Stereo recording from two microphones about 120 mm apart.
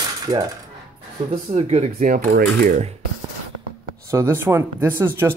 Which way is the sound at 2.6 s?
90° right.